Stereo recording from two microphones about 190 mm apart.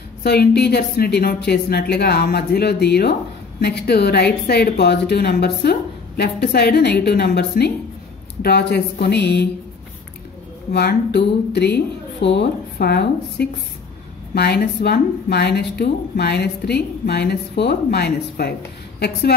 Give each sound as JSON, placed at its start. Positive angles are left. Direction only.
{"t": 0.2, "sound": "a woman's voice", "side_deg": 60}
{"t": 10.7, "sound": "a woman's voice", "side_deg": 60}